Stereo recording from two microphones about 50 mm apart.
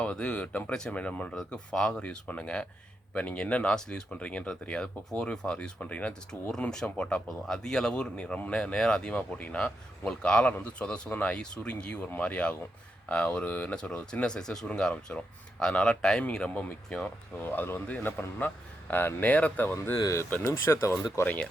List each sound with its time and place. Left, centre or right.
0.0 s speech: left
1.5 s speech: centre
2.0 s speech: left
6.8 s speech: centre
16.2 s speech: left
17.4 s speech: left
19.3 s speech: left
20.0 s speech: left
20.5 s speech: left